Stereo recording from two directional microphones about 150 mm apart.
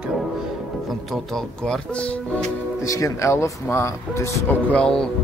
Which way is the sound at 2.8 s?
20° left (ahead or behind).